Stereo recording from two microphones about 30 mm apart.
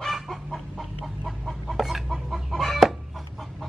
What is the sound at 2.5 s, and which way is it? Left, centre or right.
Chicken, centre.